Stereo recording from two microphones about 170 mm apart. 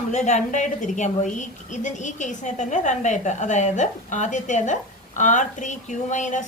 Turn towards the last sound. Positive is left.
turn(degrees=45)  # may be behind; listen again after turning